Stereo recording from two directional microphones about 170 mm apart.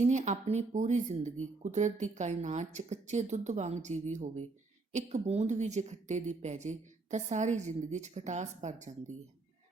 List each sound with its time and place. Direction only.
0.0 s a woman's voice: 45° right (ahead or behind)